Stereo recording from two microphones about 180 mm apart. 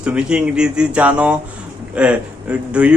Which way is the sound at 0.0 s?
5° right (ahead or behind).